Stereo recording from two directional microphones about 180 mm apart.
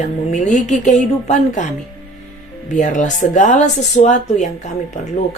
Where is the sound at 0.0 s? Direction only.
40° left (ahead or behind).